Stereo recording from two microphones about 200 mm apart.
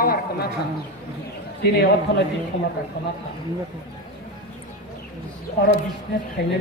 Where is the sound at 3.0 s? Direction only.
50° left (ahead or behind).